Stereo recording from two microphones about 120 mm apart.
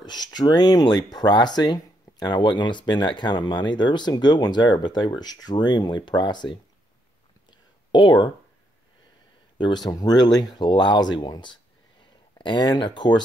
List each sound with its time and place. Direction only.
0.0 s speech: 35° left (ahead or behind)
7.9 s speech: 40° left (ahead or behind)
9.8 s speech: 35° left (ahead or behind)